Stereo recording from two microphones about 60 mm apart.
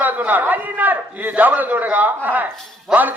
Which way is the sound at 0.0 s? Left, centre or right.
Right.